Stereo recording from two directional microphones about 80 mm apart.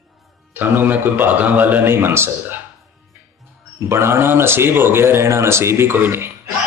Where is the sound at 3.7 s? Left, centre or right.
Right.